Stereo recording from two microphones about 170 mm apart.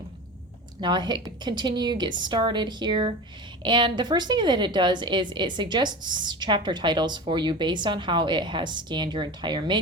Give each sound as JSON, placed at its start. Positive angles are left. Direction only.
{"t": 0.8, "sound": "a woman's voice", "side_deg": -25}